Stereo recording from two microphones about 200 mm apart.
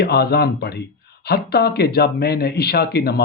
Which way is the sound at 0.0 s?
55° left (ahead or behind).